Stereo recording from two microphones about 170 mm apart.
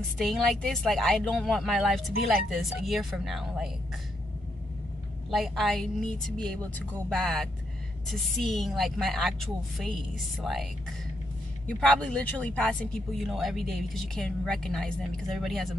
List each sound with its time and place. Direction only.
0.2 s speech: centre (ahead or behind)
5.3 s speech: centre (ahead or behind)